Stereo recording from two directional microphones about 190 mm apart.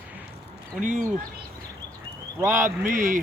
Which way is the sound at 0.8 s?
45° right (ahead or behind).